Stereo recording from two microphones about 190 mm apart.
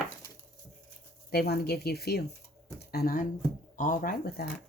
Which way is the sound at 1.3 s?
55° left (ahead or behind).